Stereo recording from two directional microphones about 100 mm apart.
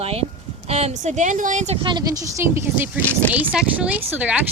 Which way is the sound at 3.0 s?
20° left (ahead or behind).